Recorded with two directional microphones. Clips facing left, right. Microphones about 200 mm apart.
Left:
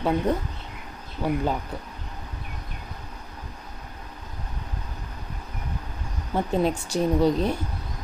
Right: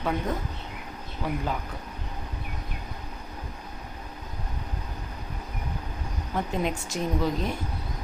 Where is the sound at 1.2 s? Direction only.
30° left (ahead or behind).